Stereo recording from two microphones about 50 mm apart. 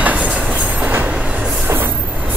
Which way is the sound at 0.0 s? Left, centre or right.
Right.